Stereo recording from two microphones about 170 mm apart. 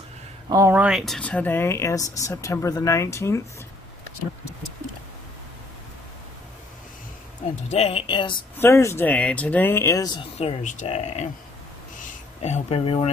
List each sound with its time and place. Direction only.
0.5 s speech: 15° right (ahead or behind)
0.8 s speech: centre (ahead or behind); by 3.4 s 15° left (ahead or behind)
7.7 s speech: 35° left (ahead or behind)
8.5 s speech: 15° left (ahead or behind)
10.4 s speech: 45° left (ahead or behind)